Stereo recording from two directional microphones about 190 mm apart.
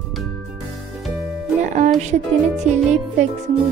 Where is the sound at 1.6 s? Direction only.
40° right (ahead or behind).